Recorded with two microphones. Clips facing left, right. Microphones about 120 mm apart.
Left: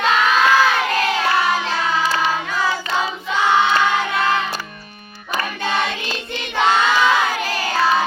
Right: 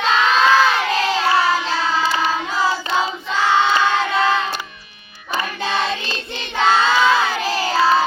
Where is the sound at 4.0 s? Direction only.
25° right (ahead or behind).